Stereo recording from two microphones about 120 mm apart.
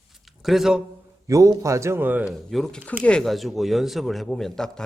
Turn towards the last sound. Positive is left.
turn(degrees=5)  # may be behind; listen again after turning